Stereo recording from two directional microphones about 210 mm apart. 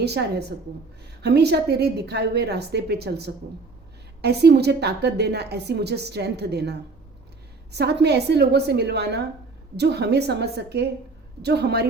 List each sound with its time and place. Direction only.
0.0 s a woman's voice: 50° right (ahead or behind)